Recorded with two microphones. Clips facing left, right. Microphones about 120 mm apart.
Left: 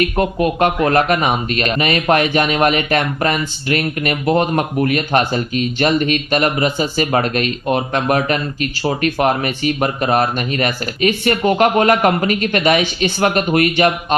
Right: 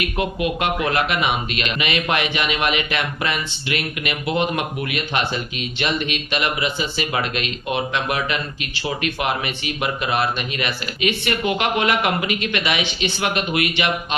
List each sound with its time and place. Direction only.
0.0 s speech: 40° left (ahead or behind)